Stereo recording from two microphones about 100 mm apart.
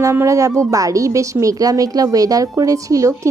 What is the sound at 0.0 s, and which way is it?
A woman's voice, 30° right (ahead or behind).